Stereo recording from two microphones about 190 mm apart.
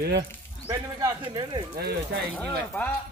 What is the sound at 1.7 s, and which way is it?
Speech, 55° right (ahead or behind).